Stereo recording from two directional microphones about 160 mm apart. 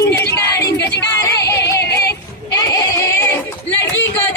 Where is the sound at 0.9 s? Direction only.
20° left (ahead or behind).